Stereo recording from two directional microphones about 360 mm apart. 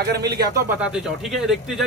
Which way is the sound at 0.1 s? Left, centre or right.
Right.